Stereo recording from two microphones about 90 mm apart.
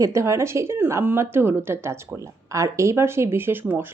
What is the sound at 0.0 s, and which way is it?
Speech, 35° right (ahead or behind).